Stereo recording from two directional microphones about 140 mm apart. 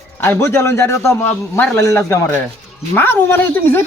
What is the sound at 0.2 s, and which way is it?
A man's voice, 15° left (ahead or behind).